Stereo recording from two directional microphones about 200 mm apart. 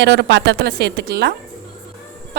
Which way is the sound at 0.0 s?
60° right (ahead or behind).